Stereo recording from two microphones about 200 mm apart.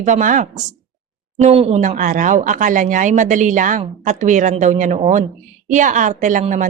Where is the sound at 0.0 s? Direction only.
40° right (ahead or behind).